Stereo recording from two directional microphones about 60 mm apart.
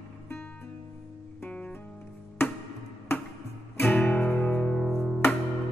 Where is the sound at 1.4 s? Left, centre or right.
Centre.